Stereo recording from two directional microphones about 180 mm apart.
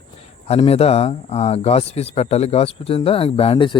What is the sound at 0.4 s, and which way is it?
Speech, 35° left (ahead or behind).